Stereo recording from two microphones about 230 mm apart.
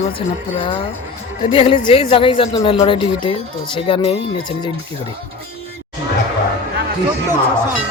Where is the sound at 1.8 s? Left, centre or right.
Left.